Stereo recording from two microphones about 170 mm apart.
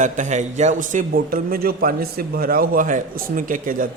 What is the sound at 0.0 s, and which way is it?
Speech, 45° right (ahead or behind).